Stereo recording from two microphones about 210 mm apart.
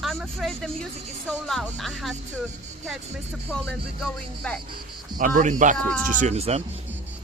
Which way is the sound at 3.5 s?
Centre (ahead or behind).